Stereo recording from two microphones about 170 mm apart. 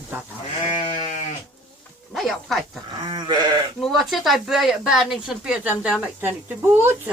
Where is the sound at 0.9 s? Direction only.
45° left (ahead or behind).